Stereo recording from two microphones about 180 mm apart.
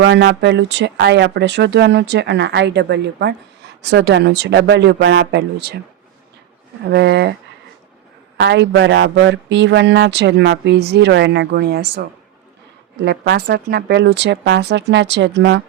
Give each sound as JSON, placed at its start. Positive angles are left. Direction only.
{"t": 0.0, "sound": "speech", "side_deg": -75}
{"t": 6.8, "sound": "speech", "side_deg": -70}
{"t": 8.4, "sound": "speech", "side_deg": -70}